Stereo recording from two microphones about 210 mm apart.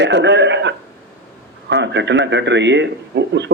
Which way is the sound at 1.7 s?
55° right (ahead or behind).